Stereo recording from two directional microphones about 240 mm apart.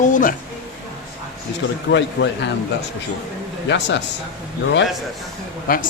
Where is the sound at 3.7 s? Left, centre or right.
Left.